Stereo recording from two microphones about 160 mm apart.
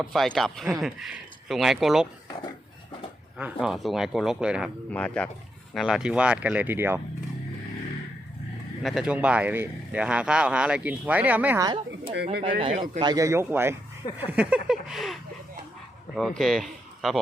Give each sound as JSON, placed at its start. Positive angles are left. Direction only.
{"t": 0.0, "sound": "speech", "side_deg": 0}
{"t": 3.3, "sound": "speech", "side_deg": -5}
{"t": 4.9, "sound": "speech", "side_deg": 5}
{"t": 8.8, "sound": "speech", "side_deg": 0}
{"t": 12.1, "sound": "speech", "side_deg": -80}
{"t": 12.5, "sound": "speech", "side_deg": -40}
{"t": 13.0, "sound": "a man's voice", "side_deg": -25}